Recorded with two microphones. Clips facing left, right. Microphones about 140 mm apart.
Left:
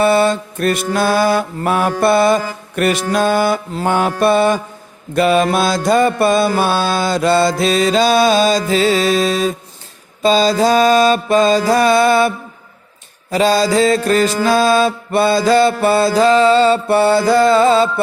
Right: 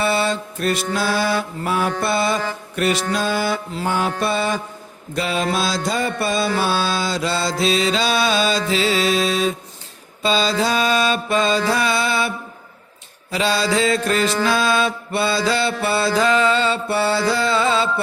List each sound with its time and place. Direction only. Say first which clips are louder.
0.0 s mantra: left 7 dB; 50° left (ahead or behind)
2.0 s music: left 8 dB; 55° left (ahead or behind)
5.1 s mantra: left 8 dB; 55° left (ahead or behind)
13.3 s mantra: left 6 dB; 40° left (ahead or behind)